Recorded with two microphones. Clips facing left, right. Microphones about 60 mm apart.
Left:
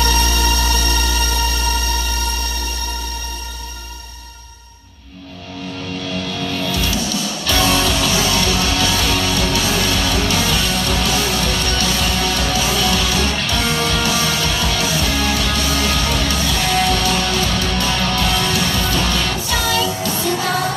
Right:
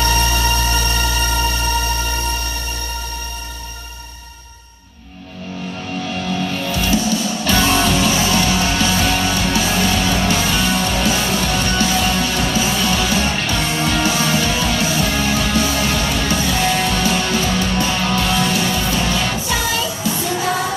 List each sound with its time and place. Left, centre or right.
0.0 s music: right
6.0 s music: right